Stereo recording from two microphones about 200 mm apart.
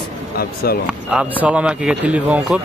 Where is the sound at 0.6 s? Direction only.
50° left (ahead or behind).